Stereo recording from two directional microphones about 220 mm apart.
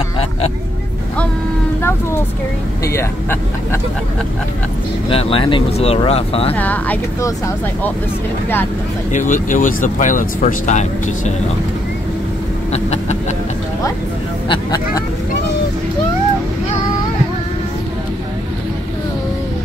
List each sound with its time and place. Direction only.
1.8 s speech: 10° left (ahead or behind)
5.1 s speech: 25° left (ahead or behind)
6.5 s speech: 5° left (ahead or behind)
9.1 s speech: 35° left (ahead or behind)
12.7 s speech: 30° left (ahead or behind)
14.5 s speech: 20° left (ahead or behind)